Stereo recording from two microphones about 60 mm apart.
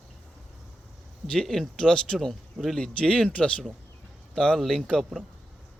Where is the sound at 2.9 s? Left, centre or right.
Centre.